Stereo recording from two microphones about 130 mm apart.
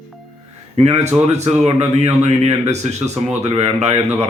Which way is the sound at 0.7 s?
60° right (ahead or behind).